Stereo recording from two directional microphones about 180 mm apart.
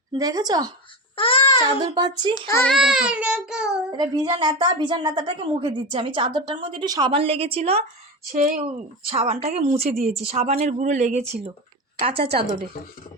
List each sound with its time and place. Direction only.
0.1 s a woman's voice: 20° right (ahead or behind)
1.1 s baby cry: 30° left (ahead or behind)
1.8 s a woman's voice: 25° right (ahead or behind)
2.6 s child singing: centre (ahead or behind)
3.9 s a woman's voice: 25° right (ahead or behind)